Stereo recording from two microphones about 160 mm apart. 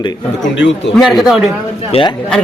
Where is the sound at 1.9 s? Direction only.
35° left (ahead or behind).